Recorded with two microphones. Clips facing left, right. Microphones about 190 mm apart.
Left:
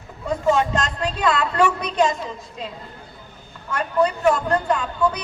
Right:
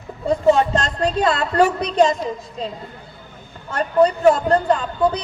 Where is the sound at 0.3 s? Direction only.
35° right (ahead or behind).